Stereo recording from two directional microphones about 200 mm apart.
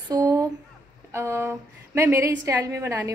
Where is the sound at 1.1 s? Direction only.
15° right (ahead or behind).